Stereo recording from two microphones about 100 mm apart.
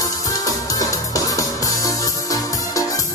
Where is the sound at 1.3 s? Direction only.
35° left (ahead or behind).